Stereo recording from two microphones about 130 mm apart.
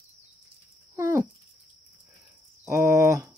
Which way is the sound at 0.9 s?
20° right (ahead or behind).